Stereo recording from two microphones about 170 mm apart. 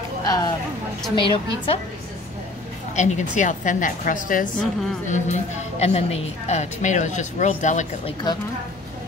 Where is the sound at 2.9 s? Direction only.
45° left (ahead or behind).